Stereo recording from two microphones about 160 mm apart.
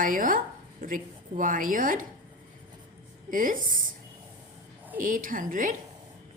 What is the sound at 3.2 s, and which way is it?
Speech, 55° right (ahead or behind).